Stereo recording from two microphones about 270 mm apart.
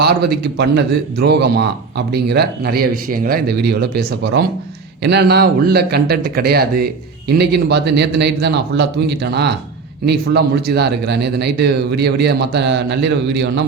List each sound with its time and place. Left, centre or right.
0.0 s speech: right